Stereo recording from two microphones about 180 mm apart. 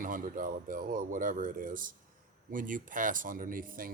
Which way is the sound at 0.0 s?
50° right (ahead or behind).